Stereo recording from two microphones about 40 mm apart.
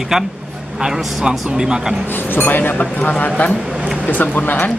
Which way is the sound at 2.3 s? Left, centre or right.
Left.